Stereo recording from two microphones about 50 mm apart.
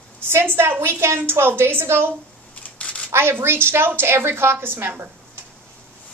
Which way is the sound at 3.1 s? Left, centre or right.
Right.